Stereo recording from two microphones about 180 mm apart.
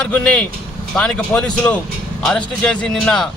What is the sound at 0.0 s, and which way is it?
Speech, 5° left (ahead or behind).